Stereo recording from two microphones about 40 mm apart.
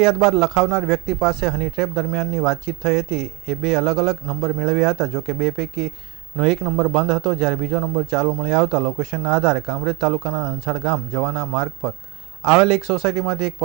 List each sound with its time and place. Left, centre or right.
0.0 s speech: centre